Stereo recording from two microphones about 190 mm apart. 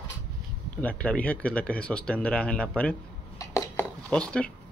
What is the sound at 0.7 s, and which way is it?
Speech, 5° left (ahead or behind).